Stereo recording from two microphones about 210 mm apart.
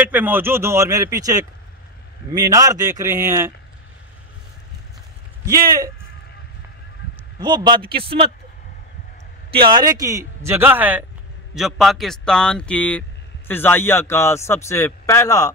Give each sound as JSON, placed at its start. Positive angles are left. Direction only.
{"t": 0.0, "sound": "a man's voice", "side_deg": -10}
{"t": 7.3, "sound": "a man's voice", "side_deg": -20}
{"t": 9.5, "sound": "a man's voice", "side_deg": -25}